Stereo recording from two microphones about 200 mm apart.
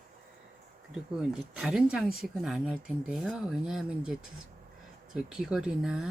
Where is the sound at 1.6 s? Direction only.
5° right (ahead or behind).